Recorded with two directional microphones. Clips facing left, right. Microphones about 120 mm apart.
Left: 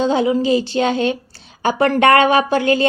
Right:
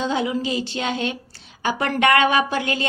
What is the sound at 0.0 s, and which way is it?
A woman's voice, 35° left (ahead or behind).